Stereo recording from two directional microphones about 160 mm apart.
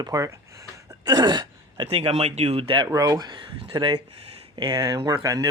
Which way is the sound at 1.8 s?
40° right (ahead or behind).